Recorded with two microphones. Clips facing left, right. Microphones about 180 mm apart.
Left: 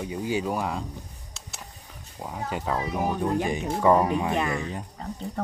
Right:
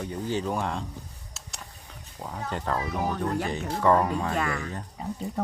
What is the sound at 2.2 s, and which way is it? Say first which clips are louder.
Speech: left 1 dB; 10° left (ahead or behind).